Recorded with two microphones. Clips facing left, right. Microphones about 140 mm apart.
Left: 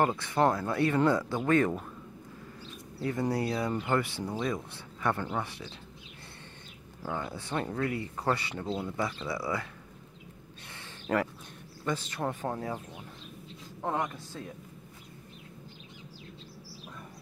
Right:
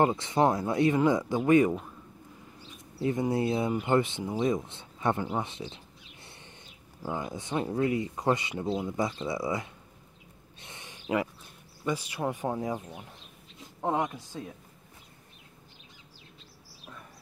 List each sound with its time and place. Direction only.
0.0 s speech: 20° right (ahead or behind)
3.0 s speech: 20° right (ahead or behind)
7.0 s speech: 15° right (ahead or behind)
10.7 s a sound: 15° right (ahead or behind)
11.8 s speech: 10° right (ahead or behind)